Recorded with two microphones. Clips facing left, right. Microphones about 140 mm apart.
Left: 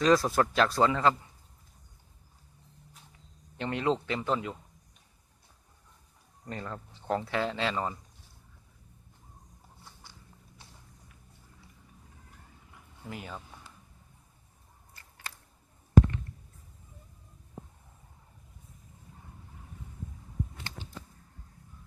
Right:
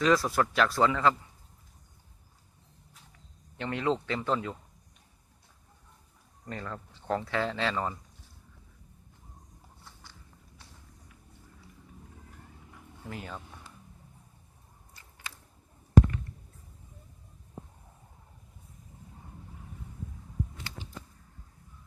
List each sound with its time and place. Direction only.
0.0 s speech: 25° left (ahead or behind)
3.6 s speech: 20° left (ahead or behind)
6.5 s speech: 25° left (ahead or behind)
13.1 s speech: 15° left (ahead or behind)